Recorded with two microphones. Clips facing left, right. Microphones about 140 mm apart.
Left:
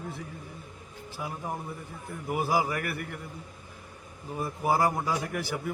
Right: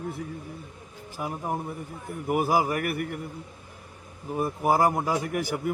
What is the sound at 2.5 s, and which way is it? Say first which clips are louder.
Speech: right 3 dB; 50° right (ahead or behind).